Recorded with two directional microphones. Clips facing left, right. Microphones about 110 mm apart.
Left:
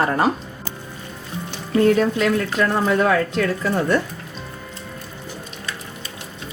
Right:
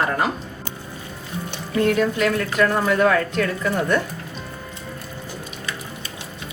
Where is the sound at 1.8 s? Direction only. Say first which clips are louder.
Left 2 dB; 35° left (ahead or behind).